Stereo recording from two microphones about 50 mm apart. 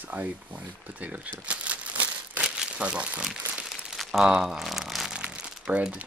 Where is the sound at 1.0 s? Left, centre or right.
Right.